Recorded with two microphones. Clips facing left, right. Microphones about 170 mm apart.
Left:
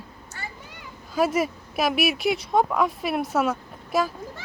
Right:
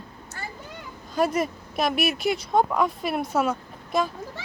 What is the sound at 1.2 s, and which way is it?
Speech, 5° left (ahead or behind).